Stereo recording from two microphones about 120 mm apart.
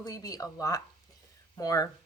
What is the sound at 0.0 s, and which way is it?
A woman's voice, 30° left (ahead or behind).